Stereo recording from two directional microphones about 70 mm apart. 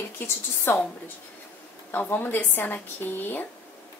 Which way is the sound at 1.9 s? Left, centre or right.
Left.